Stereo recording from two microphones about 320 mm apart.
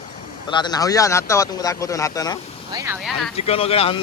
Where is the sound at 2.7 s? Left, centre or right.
Centre.